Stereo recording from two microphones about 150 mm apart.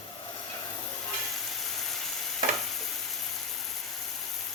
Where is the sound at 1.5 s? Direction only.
Centre (ahead or behind).